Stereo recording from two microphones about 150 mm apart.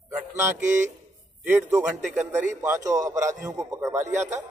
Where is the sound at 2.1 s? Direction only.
10° right (ahead or behind).